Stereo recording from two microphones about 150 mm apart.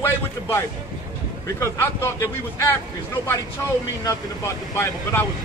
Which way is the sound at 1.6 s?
15° left (ahead or behind).